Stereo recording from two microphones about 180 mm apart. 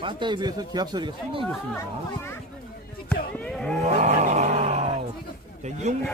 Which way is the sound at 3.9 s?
40° right (ahead or behind).